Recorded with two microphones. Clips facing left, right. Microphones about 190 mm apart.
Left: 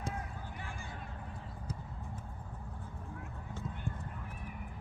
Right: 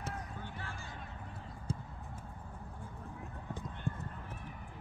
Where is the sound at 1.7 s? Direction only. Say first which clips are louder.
Right 5 dB; 25° right (ahead or behind).